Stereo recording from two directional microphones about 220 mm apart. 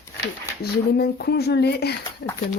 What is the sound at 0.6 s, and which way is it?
Speech, 45° left (ahead or behind).